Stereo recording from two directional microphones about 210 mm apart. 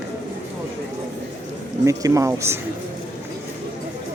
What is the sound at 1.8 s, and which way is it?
Speech, 15° right (ahead or behind).